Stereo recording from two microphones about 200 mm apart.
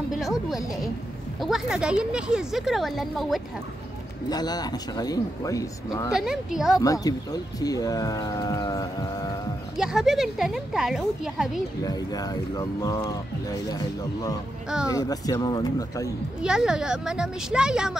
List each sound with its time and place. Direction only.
0.2 s speech: centre (ahead or behind)
4.3 s speech: 20° left (ahead or behind)
6.1 s speech: 5° right (ahead or behind)
6.8 s speech: 15° left (ahead or behind)
9.8 s speech: 5° right (ahead or behind)
11.8 s speech: 20° left (ahead or behind)
16.4 s speech: 5° right (ahead or behind)